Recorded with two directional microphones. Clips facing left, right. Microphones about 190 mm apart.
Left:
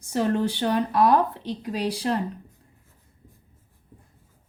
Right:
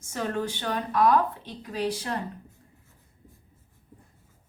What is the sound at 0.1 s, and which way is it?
Speech, 35° left (ahead or behind).